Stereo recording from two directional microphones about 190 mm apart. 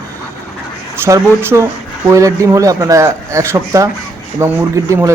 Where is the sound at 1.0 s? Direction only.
15° right (ahead or behind).